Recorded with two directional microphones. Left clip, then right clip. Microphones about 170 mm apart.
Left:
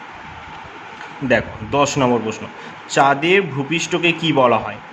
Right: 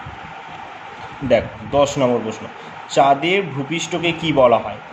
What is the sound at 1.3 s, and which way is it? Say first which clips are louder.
A man's voice: right 1 dB; 40° left (ahead or behind).